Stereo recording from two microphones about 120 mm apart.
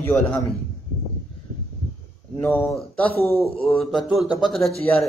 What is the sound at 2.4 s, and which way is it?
Speech, 20° left (ahead or behind).